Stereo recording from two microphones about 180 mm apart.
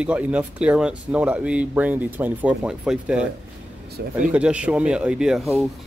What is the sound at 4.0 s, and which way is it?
Speech, 65° right (ahead or behind).